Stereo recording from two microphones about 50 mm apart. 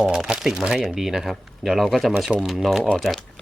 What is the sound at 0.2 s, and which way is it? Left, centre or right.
Speech, centre.